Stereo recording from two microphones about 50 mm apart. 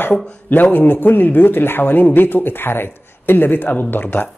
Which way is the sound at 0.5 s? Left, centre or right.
Left.